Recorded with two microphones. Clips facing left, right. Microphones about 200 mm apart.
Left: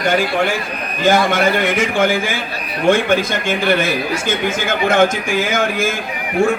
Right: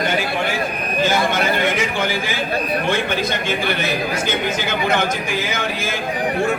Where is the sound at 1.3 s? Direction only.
50° left (ahead or behind).